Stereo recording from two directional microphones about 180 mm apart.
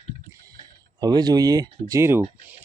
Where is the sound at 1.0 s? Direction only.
20° right (ahead or behind).